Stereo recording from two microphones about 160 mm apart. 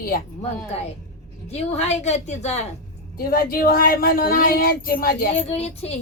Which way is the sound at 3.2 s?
65° left (ahead or behind).